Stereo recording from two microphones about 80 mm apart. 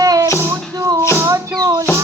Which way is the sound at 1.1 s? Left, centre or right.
Right.